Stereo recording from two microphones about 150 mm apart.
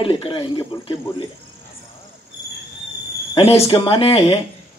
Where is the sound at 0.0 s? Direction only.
35° left (ahead or behind).